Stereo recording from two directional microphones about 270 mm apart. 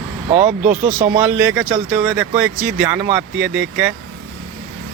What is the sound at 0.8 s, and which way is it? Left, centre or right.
Speech, right.